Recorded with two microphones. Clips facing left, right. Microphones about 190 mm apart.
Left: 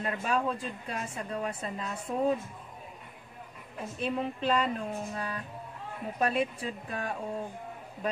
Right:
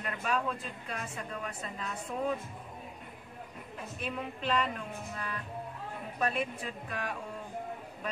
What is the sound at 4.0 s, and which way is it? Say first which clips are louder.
A woman's voice: left 7 dB; 30° left (ahead or behind).